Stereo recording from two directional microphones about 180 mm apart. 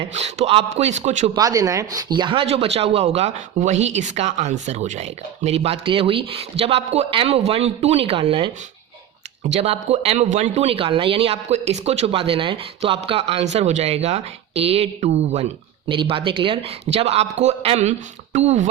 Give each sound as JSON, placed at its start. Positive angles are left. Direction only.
{"t": 0.1, "sound": "speech", "side_deg": -35}
{"t": 1.4, "sound": "speech", "side_deg": -20}
{"t": 9.5, "sound": "speech", "side_deg": -35}